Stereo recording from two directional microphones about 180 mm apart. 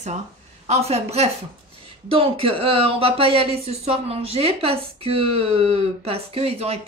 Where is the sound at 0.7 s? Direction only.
35° right (ahead or behind).